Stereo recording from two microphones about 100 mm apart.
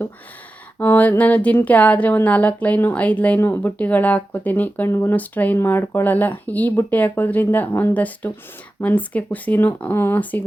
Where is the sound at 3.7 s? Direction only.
15° left (ahead or behind).